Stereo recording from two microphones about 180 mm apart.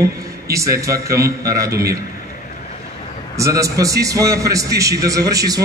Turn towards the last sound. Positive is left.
turn(degrees=-20)  # may be behind; listen again after turning